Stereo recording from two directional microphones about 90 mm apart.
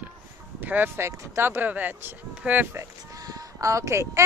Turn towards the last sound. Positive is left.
turn(degrees=-35)  # may be behind; listen again after turning